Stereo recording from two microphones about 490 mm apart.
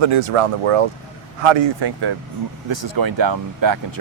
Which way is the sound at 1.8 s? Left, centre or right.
Right.